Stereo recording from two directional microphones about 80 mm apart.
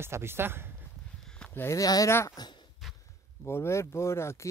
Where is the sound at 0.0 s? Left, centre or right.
Right.